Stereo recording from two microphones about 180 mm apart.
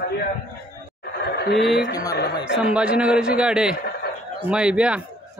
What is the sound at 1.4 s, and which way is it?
Speech, 65° left (ahead or behind).